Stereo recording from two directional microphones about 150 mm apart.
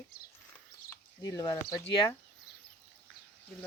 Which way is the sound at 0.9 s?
25° left (ahead or behind).